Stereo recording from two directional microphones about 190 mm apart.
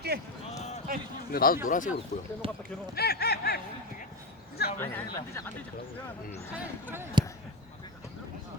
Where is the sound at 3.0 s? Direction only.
55° left (ahead or behind).